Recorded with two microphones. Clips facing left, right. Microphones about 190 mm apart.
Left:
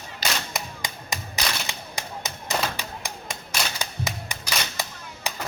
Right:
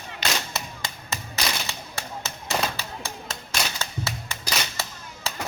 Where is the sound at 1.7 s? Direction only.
15° left (ahead or behind).